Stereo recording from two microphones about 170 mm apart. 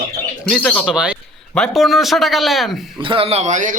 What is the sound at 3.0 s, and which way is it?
Speech, 30° right (ahead or behind).